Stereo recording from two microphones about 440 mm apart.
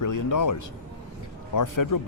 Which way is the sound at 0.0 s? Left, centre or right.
Left.